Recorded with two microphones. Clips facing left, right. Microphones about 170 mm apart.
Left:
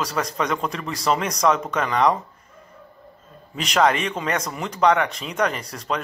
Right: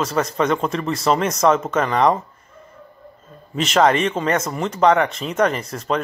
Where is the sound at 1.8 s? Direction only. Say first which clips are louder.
Right 1 dB; 35° right (ahead or behind).